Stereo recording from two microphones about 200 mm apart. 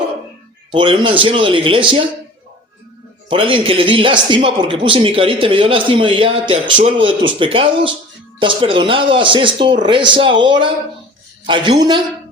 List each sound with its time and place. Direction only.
0.7 s speech: 25° right (ahead or behind)
3.2 s speech: 25° right (ahead or behind)